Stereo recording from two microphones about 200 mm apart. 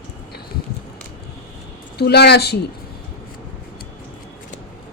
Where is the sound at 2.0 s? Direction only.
55° left (ahead or behind).